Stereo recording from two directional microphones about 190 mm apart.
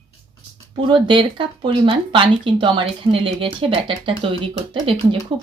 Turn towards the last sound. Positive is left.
turn(degrees=-25)  # may be behind; listen again after turning